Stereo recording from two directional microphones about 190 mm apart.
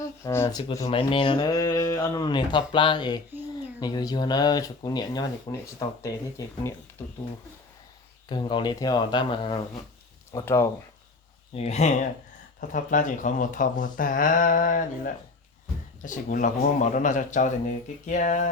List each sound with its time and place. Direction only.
0.0 s speech: 15° left (ahead or behind)
0.9 s speech: 30° left (ahead or behind)
8.3 s speech: 25° left (ahead or behind)
10.3 s speech: 15° left (ahead or behind)
11.5 s speech: 35° left (ahead or behind)
12.5 s speech: 45° left (ahead or behind)